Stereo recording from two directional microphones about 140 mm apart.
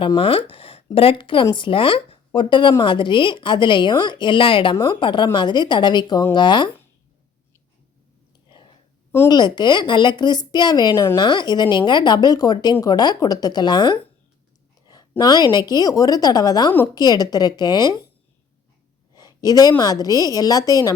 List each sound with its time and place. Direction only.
0.2 s speech: 40° left (ahead or behind)
8.4 s whispering: 35° left (ahead or behind)
9.3 s speech: 30° left (ahead or behind)
11.2 s a woman's voice: 30° left (ahead or behind)
15.2 s a woman's voice: 30° left (ahead or behind)
19.1 s a sound: 25° left (ahead or behind)
19.8 s a woman's voice: 25° left (ahead or behind)